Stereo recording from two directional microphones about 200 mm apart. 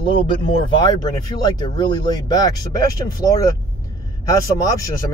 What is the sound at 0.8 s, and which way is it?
Speech, 20° left (ahead or behind).